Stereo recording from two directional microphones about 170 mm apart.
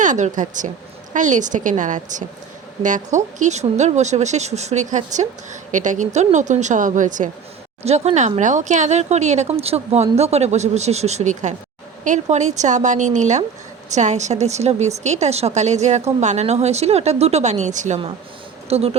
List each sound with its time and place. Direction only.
0.0 s speech: 45° right (ahead or behind)